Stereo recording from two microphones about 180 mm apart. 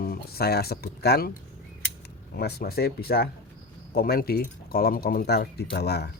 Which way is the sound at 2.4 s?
60° left (ahead or behind).